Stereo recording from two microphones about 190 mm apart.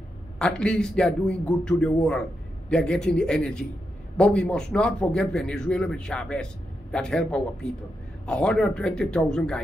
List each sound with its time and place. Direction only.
0.4 s a man's voice: 5° left (ahead or behind)